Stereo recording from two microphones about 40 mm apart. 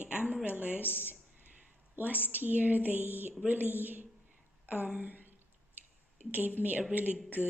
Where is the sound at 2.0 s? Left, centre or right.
Right.